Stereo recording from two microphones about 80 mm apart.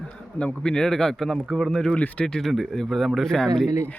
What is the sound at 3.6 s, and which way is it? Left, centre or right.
Speech, right.